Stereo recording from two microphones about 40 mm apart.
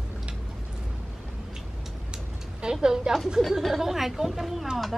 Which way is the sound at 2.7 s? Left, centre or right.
Centre.